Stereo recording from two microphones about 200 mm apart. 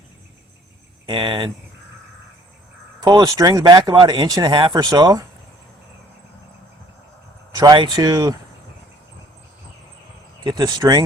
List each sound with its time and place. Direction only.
1.0 s speech: 25° right (ahead or behind)
3.0 s speech: 20° right (ahead or behind)
7.5 s speech: 20° right (ahead or behind)
10.4 s speech: 20° right (ahead or behind)